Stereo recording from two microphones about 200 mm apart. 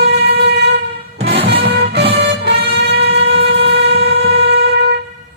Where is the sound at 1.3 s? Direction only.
55° right (ahead or behind).